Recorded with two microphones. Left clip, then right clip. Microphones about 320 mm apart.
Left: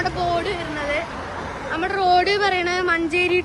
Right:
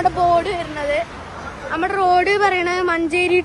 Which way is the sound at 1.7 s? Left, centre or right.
Centre.